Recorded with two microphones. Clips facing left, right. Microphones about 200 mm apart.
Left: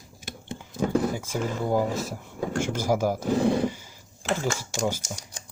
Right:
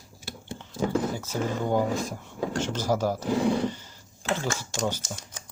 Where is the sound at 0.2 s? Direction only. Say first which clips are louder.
Left 1 dB; 20° left (ahead or behind).